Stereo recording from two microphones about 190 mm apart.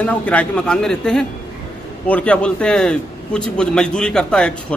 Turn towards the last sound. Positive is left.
turn(degrees=5)  # may be behind; listen again after turning